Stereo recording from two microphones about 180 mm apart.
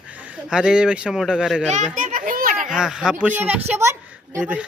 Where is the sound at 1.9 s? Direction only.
45° right (ahead or behind).